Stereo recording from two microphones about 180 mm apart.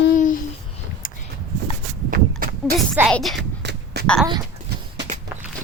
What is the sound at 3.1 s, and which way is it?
Speech, centre (ahead or behind).